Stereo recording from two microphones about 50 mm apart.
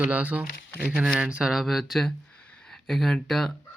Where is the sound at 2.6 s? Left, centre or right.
Centre.